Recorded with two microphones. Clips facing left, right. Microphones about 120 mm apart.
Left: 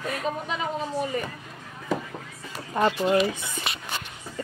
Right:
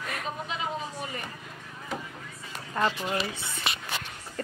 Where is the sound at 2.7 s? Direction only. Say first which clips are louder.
Left 6 dB; 25° left (ahead or behind).